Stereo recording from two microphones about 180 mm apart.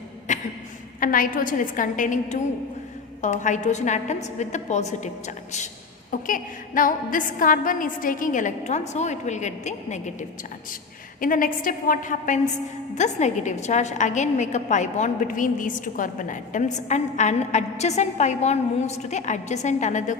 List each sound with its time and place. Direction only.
0.3 s a sound: 40° left (ahead or behind)
0.9 s a woman's voice: 50° left (ahead or behind)
6.1 s a woman's voice: 50° left (ahead or behind)